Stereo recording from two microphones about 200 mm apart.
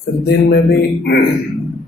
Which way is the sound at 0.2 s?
55° left (ahead or behind).